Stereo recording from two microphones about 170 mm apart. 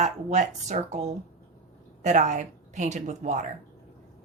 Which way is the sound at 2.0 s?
45° right (ahead or behind).